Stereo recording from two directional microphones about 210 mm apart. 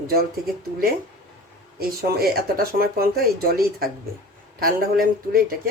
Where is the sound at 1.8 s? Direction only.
45° right (ahead or behind).